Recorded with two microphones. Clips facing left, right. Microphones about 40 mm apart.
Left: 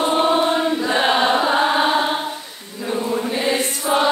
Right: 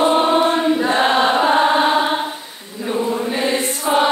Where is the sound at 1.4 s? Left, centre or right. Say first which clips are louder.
Right 3 dB; centre.